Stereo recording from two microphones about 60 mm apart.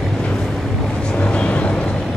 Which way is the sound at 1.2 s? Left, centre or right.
Centre.